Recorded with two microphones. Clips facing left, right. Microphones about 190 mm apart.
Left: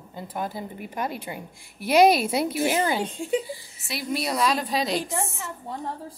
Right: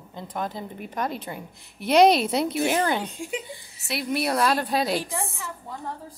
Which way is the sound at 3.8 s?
Centre (ahead or behind).